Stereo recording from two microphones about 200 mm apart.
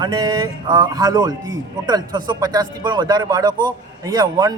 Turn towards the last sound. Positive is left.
turn(degrees=-20)  # may be behind; listen again after turning